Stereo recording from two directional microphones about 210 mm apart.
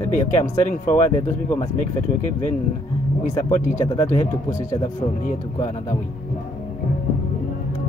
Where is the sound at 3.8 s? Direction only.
15° left (ahead or behind).